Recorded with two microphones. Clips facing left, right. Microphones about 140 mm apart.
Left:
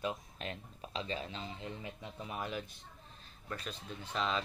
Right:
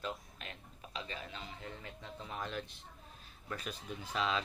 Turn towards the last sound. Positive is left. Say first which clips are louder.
# even
turn(degrees=-10)  # may be behind; listen again after turning